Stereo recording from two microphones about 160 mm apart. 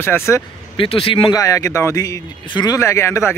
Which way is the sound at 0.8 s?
35° left (ahead or behind).